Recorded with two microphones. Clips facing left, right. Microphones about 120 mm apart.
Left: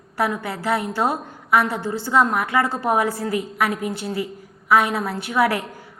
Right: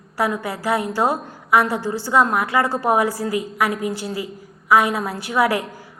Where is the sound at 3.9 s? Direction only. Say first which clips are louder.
Right 1 dB; 25° left (ahead or behind).